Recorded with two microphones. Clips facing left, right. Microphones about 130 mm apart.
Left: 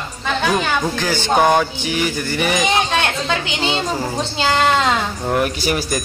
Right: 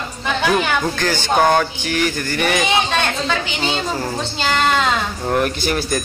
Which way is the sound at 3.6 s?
25° left (ahead or behind).